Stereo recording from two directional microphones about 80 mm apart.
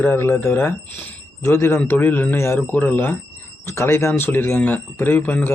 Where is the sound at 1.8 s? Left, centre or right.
Left.